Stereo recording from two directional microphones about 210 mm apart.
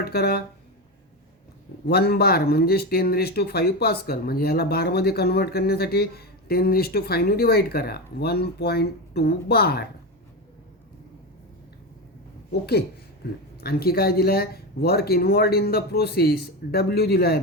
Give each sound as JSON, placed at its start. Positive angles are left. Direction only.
{"t": 0.0, "sound": "speech", "side_deg": 50}
{"t": 1.9, "sound": "speech", "side_deg": 50}
{"t": 13.2, "sound": "speech", "side_deg": 50}